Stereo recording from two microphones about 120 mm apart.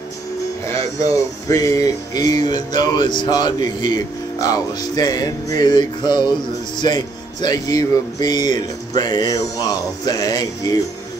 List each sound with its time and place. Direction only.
1.5 s music: 25° left (ahead or behind)